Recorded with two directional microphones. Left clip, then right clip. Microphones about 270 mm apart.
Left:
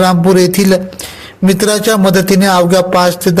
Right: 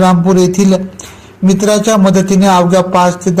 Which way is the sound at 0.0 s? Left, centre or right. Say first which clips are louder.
Left 1 dB; left.